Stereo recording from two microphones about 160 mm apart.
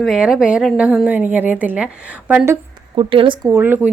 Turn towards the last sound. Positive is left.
turn(degrees=-15)  # may be behind; listen again after turning